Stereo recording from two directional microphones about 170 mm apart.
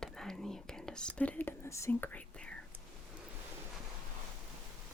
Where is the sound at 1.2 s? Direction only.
10° left (ahead or behind).